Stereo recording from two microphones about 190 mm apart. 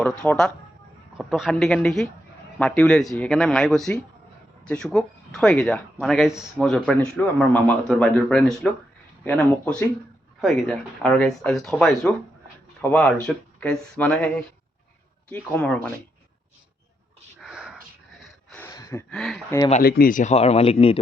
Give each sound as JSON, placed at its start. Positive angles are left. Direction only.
{"t": 0.0, "sound": "speech", "side_deg": 5}
{"t": 17.4, "sound": "a sound", "side_deg": -5}
{"t": 18.2, "sound": "gasp", "side_deg": 5}
{"t": 18.7, "sound": "a sound", "side_deg": 15}
{"t": 19.1, "sound": "speech", "side_deg": 0}
{"t": 19.8, "sound": "speech", "side_deg": 55}